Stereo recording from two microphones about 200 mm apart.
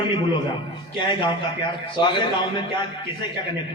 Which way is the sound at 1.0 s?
25° left (ahead or behind).